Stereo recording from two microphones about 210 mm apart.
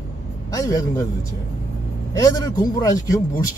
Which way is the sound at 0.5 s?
15° left (ahead or behind).